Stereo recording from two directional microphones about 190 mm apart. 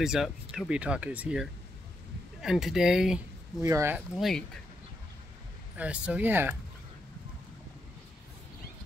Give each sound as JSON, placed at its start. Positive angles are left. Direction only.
{"t": 0.0, "sound": "speech", "side_deg": 0}
{"t": 3.6, "sound": "speech", "side_deg": -15}
{"t": 4.2, "sound": "speech", "side_deg": 0}
{"t": 5.8, "sound": "speech", "side_deg": -5}